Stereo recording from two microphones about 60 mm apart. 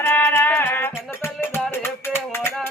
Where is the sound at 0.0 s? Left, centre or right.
Left.